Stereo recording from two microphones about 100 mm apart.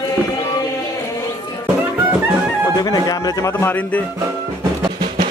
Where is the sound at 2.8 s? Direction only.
40° left (ahead or behind); by 4.0 s 20° left (ahead or behind).